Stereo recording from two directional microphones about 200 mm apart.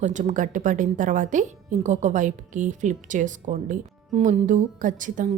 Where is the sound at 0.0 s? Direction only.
40° right (ahead or behind).